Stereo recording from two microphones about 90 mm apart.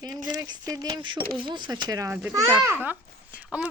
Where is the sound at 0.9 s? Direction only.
60° right (ahead or behind); by 2.1 s 45° right (ahead or behind).